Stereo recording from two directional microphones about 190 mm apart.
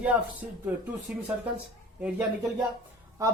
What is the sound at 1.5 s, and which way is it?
Speech, 5° right (ahead or behind).